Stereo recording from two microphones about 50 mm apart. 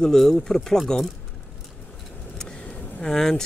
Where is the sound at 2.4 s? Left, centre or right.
Centre.